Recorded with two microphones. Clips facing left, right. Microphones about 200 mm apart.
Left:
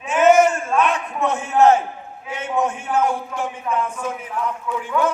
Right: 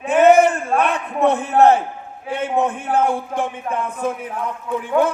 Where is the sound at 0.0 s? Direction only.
60° right (ahead or behind).